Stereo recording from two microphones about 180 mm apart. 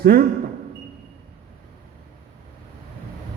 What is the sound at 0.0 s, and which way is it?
Speech, 60° right (ahead or behind).